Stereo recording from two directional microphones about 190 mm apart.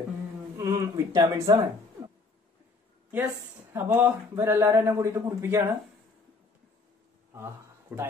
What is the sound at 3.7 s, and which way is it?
Speech, 15° right (ahead or behind).